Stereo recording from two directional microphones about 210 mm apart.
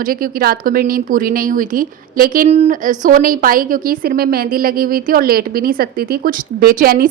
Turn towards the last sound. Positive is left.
turn(degrees=-45)  # may be behind; listen again after turning